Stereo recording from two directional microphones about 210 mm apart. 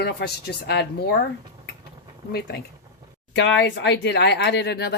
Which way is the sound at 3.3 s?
55° left (ahead or behind).